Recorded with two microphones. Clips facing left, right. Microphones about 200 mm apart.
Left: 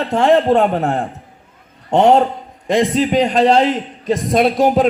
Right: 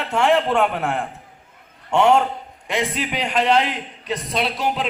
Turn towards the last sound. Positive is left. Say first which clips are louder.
# left 10 dB
turn(degrees=45)  # may be behind; listen again after turning